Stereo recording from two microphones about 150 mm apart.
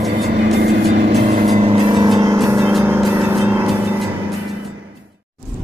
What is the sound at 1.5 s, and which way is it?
Vehicle, 40° right (ahead or behind).